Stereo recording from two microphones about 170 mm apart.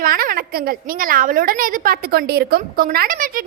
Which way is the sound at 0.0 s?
60° right (ahead or behind).